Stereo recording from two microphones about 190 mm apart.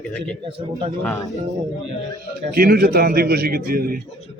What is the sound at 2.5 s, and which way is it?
A man's voice, 50° right (ahead or behind).